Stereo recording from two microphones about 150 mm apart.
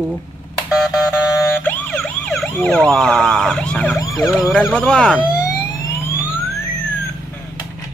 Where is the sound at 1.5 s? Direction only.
10° left (ahead or behind).